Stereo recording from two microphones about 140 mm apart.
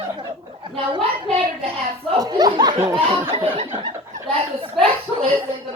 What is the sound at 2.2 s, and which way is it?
Speech, 30° right (ahead or behind).